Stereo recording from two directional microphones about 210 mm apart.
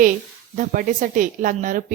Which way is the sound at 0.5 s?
40° right (ahead or behind).